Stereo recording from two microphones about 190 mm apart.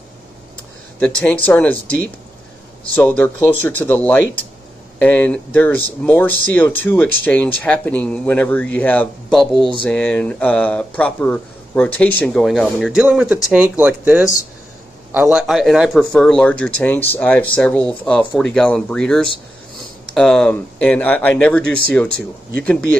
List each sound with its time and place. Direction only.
0.9 s speech: 5° left (ahead or behind)